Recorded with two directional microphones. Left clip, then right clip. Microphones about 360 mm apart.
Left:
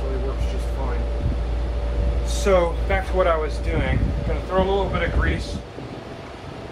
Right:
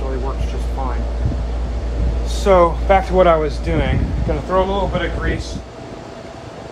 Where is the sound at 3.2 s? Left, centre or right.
Right.